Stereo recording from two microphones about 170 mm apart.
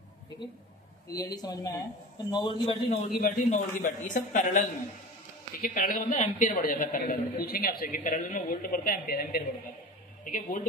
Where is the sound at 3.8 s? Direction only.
50° left (ahead or behind).